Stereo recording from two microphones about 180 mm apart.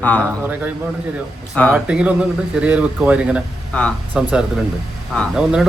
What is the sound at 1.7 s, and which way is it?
A man's voice, 5° right (ahead or behind).